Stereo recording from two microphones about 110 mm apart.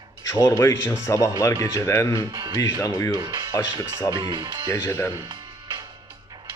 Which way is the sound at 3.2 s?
35° right (ahead or behind).